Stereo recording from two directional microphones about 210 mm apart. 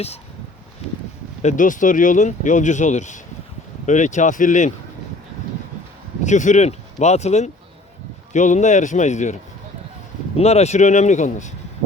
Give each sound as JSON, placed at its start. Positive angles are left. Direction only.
{"t": 1.4, "sound": "speech", "side_deg": 35}
{"t": 6.2, "sound": "speech", "side_deg": 35}
{"t": 10.3, "sound": "speech", "side_deg": 30}